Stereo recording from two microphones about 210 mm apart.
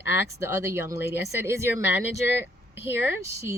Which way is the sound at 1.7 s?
60° left (ahead or behind).